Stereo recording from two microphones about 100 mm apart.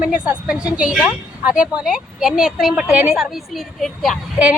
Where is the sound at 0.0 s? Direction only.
15° right (ahead or behind).